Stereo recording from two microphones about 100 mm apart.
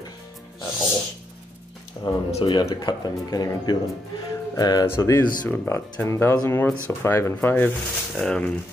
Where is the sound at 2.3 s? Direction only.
70° left (ahead or behind).